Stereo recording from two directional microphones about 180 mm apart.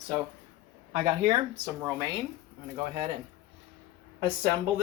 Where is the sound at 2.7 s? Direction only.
30° right (ahead or behind).